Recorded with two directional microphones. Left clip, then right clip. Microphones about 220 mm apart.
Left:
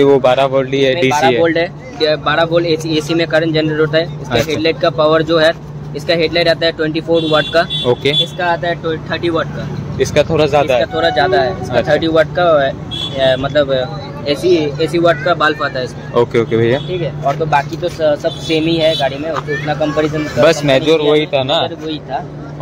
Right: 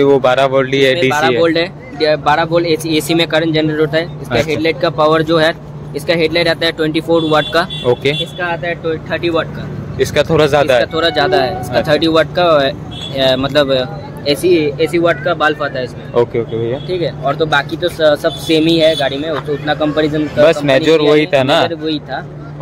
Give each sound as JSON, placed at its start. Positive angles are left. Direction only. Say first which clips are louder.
{"t": 0.0, "sound": "speech", "louder": "even", "side_deg": -5}
{"t": 1.4, "sound": "speech", "louder": "even", "side_deg": -50}
{"t": 7.8, "sound": "speech", "louder": "left 1 dB", "side_deg": -5}
{"t": 10.8, "sound": "speech", "louder": "even", "side_deg": -45}
{"t": 16.3, "sound": "speech", "louder": "left 5 dB", "side_deg": 15}
{"t": 17.0, "sound": "speech", "louder": "right 1 dB", "side_deg": -45}
{"t": 20.4, "sound": "speech", "louder": "even", "side_deg": 0}
{"t": 21.1, "sound": "speech", "louder": "right 2 dB", "side_deg": -15}
{"t": 21.6, "sound": "speech", "louder": "right 4 dB", "side_deg": -50}